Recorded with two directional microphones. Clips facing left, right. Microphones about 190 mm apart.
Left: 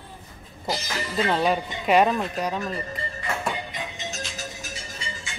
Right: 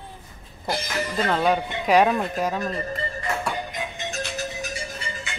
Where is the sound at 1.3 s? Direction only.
Centre (ahead or behind).